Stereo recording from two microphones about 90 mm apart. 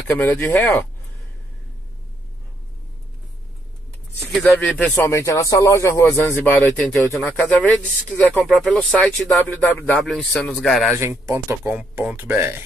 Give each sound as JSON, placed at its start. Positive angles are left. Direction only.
{"t": 0.1, "sound": "speech", "side_deg": 25}
{"t": 4.3, "sound": "speech", "side_deg": 0}
{"t": 4.7, "sound": "speech", "side_deg": 20}
{"t": 5.0, "sound": "speech", "side_deg": 35}
{"t": 8.5, "sound": "speech", "side_deg": 0}
{"t": 9.6, "sound": "speech", "side_deg": 20}
{"t": 10.0, "sound": "speech", "side_deg": 0}
{"t": 10.9, "sound": "speech", "side_deg": -35}
{"t": 11.7, "sound": "speech", "side_deg": -15}